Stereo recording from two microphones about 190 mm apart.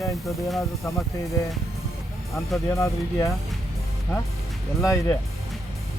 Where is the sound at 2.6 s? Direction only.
15° left (ahead or behind).